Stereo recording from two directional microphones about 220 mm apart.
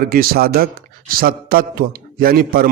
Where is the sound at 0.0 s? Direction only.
40° right (ahead or behind).